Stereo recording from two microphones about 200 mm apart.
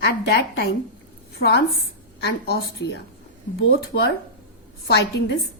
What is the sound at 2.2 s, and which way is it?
A woman's voice, 55° left (ahead or behind).